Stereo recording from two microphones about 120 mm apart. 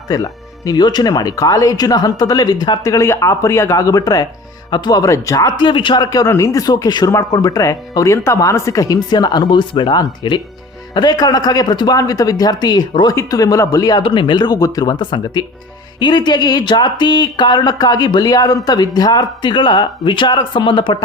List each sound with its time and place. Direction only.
0.1 s a man's voice: 30° left (ahead or behind)
14.0 s a man's voice: 40° left (ahead or behind)